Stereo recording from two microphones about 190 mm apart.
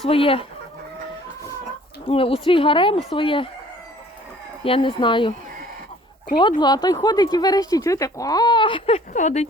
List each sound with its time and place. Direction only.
0.1 s speech: 30° left (ahead or behind)
2.0 s speech: 30° left (ahead or behind)
4.6 s speech: 30° left (ahead or behind)
6.6 s speech: 20° left (ahead or behind)
9.1 s speech: 35° left (ahead or behind)